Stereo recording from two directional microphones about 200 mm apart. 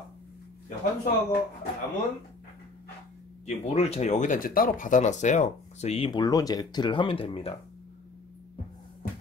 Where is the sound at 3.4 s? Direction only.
30° left (ahead or behind).